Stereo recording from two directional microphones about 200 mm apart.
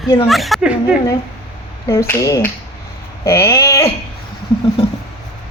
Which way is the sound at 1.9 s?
15° left (ahead or behind).